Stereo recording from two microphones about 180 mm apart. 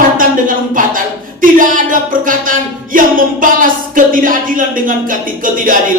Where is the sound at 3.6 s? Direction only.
50° right (ahead or behind).